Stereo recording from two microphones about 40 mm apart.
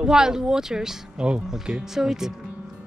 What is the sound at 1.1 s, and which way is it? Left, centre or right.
Speech, right.